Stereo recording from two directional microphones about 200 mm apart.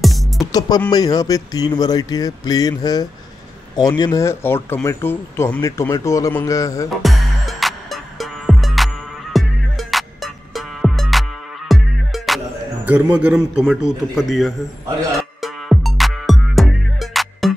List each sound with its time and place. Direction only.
0.0 s music: centre (ahead or behind)
0.5 s speech: 20° left (ahead or behind)
7.0 s music: centre (ahead or behind)
12.8 s a man's voice: 10° right (ahead or behind)
15.4 s music: centre (ahead or behind)